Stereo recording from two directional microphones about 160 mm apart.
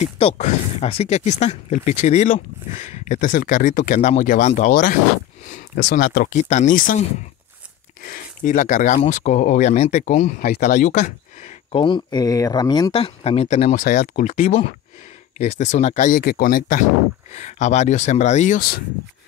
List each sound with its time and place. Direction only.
0.0 s speech: 45° left (ahead or behind)
8.0 s speech: 60° left (ahead or behind)
10.4 s speech: 75° left (ahead or behind)
10.8 s speech: 50° left (ahead or behind)
11.7 s speech: 30° left (ahead or behind)
13.8 s speech: 65° left (ahead or behind)
17.3 s speech: 45° left (ahead or behind)